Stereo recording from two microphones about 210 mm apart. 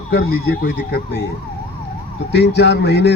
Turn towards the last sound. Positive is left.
turn(degrees=55)  # may be behind; listen again after turning